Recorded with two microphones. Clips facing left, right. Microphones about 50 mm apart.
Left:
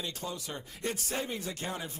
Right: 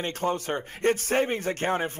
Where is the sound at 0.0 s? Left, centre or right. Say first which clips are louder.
Right 11 dB; right.